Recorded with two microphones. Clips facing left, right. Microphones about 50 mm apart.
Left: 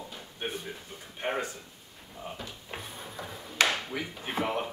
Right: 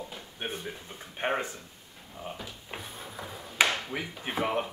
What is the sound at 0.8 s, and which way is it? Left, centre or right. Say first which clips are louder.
Speech: right 4 dB; right.